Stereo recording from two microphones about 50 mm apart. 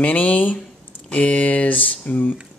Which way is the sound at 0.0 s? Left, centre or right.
Left.